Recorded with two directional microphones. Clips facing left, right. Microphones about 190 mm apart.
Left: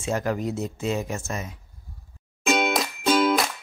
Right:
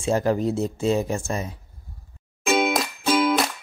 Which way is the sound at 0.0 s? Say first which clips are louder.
Right 5 dB; 30° right (ahead or behind).